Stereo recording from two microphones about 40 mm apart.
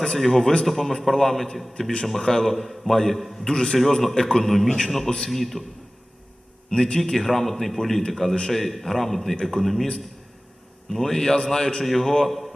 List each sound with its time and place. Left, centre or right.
0.0 s a man's voice: centre
3.4 s a man's voice: centre
3.8 s a man's voice: centre
6.7 s a man's voice: centre
7.0 s a man's voice: centre
10.9 s a man's voice: centre